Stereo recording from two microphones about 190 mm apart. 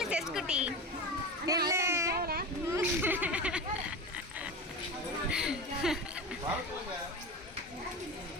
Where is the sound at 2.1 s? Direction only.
55° right (ahead or behind).